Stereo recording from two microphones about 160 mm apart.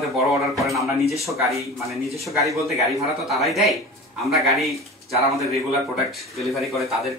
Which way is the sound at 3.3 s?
Centre (ahead or behind).